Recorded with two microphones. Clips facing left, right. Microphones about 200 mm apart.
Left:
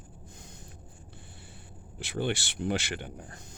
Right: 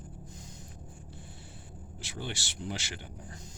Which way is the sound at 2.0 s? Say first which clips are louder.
Left 9 dB; 60° left (ahead or behind).